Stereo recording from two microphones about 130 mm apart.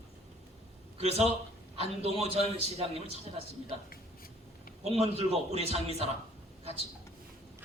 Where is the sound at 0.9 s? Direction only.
55° right (ahead or behind).